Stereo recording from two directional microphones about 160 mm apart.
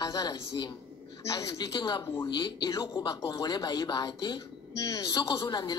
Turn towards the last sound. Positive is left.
turn(degrees=25)  # may be behind; listen again after turning